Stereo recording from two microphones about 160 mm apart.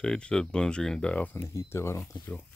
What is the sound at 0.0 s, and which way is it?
Speech, 5° left (ahead or behind).